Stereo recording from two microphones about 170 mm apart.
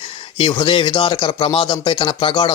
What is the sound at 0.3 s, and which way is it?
Speech, 30° left (ahead or behind).